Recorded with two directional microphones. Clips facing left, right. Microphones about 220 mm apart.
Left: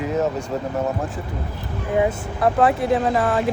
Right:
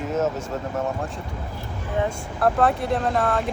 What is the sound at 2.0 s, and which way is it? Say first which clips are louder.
Speech: left 2 dB; 5° left (ahead or behind).